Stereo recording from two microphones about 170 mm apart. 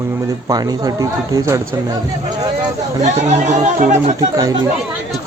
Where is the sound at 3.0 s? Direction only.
45° right (ahead or behind).